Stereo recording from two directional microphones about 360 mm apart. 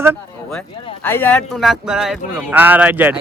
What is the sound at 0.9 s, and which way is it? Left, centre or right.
Speech, centre.